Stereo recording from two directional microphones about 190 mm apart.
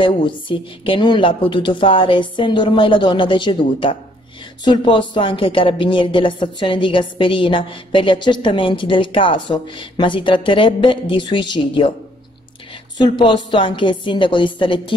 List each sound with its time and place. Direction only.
0.0 s speech: 25° left (ahead or behind)
12.9 s speech: 25° left (ahead or behind)